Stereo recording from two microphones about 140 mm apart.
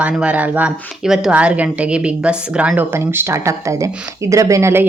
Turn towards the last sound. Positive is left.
turn(degrees=-20)  # may be behind; listen again after turning